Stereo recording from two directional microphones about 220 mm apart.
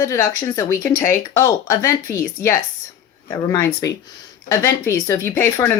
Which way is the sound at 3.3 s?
15° left (ahead or behind).